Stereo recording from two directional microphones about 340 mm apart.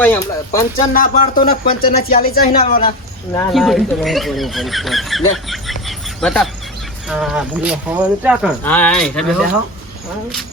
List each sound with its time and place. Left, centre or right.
0.0 s speech: centre
0.9 s speech: left
3.3 s speech: centre